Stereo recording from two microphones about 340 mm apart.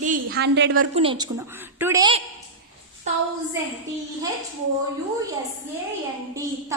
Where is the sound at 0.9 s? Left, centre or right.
Centre.